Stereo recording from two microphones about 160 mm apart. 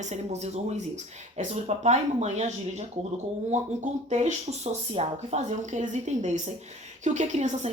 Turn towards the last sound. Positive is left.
turn(degrees=-45)  # may be behind; listen again after turning